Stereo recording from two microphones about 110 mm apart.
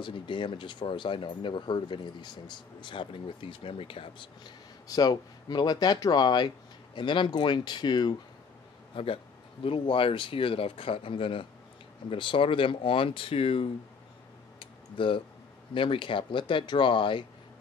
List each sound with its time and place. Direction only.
0.0 s speech: 45° left (ahead or behind)
4.8 s speech: 35° left (ahead or behind)
8.9 s speech: 55° left (ahead or behind)
14.6 s a sound: 50° left (ahead or behind)
15.7 s speech: 50° left (ahead or behind)